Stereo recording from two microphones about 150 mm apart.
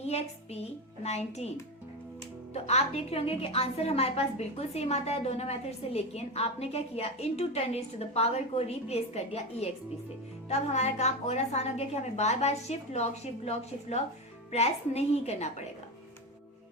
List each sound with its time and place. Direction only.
0.0 s a woman's voice: 45° left (ahead or behind)